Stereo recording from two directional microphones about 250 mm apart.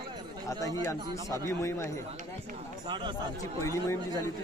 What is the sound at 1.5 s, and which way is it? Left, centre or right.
Speech, centre.